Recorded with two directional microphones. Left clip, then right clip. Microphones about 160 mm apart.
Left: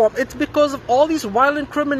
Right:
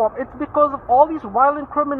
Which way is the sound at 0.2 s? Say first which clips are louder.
Even; 15° left (ahead or behind).